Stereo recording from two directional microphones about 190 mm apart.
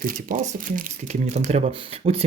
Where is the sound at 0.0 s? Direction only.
45° right (ahead or behind).